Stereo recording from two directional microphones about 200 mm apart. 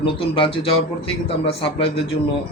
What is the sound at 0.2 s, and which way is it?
A man's voice, 25° left (ahead or behind).